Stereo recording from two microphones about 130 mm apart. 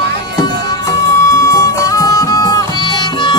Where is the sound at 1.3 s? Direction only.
25° left (ahead or behind).